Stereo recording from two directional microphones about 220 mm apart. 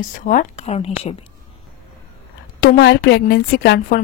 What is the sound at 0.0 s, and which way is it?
Speech, 35° left (ahead or behind).